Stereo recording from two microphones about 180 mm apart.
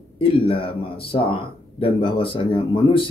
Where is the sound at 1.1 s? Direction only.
30° left (ahead or behind).